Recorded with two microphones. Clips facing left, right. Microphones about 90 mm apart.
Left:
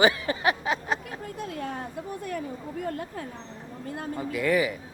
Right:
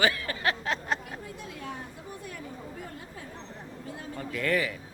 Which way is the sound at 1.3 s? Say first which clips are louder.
Left 9 dB; 55° left (ahead or behind).